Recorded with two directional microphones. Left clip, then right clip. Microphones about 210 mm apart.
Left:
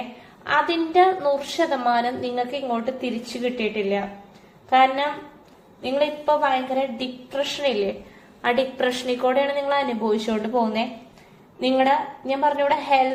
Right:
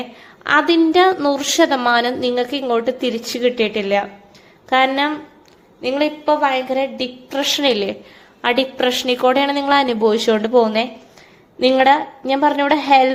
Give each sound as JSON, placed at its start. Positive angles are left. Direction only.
{"t": 0.4, "sound": "a woman's voice", "side_deg": -55}
{"t": 8.4, "sound": "a woman's voice", "side_deg": -40}